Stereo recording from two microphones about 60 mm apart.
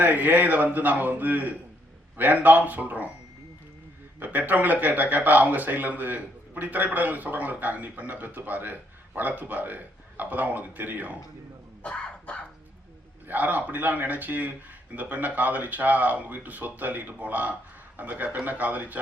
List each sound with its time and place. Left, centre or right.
0.0 s speech: right
4.2 s speech: right
11.8 s dog: centre
13.2 s speech: right